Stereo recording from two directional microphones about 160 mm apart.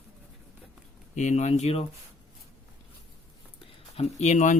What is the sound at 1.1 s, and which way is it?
Speech, 50° left (ahead or behind).